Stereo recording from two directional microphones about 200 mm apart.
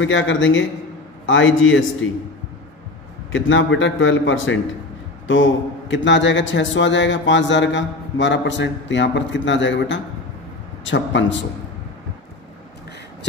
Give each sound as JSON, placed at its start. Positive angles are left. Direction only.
{"t": 0.0, "sound": "a man's voice", "side_deg": 70}
{"t": 3.3, "sound": "a man's voice", "side_deg": 70}